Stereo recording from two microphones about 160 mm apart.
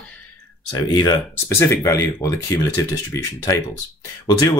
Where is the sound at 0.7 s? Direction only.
25° left (ahead or behind).